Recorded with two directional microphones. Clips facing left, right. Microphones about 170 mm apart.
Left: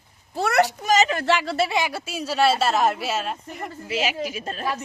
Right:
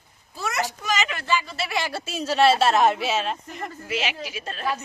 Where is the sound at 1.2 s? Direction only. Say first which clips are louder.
Left 4 dB; 75° left (ahead or behind).